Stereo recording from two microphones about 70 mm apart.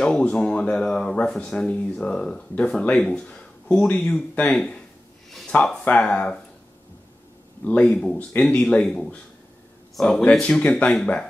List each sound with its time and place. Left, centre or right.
0.0 s a man's voice: centre
5.9 s speech: centre
7.6 s a man's voice: centre